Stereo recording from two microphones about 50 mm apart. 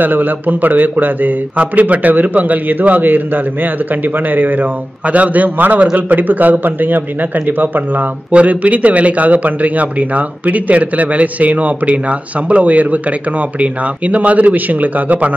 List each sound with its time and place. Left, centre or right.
0.0 s a man's voice: right
8.3 s a man's voice: right